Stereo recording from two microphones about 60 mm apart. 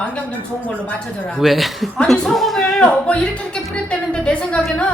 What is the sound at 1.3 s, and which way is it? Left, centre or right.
A woman's voice, centre.